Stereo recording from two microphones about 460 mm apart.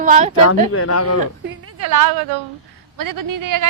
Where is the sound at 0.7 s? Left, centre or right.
Left.